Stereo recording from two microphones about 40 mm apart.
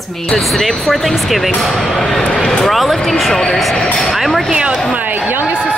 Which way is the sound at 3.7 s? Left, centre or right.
Centre.